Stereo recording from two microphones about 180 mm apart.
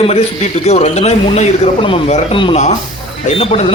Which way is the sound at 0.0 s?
35° left (ahead or behind).